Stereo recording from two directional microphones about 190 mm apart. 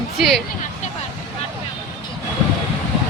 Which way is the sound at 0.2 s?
Centre (ahead or behind).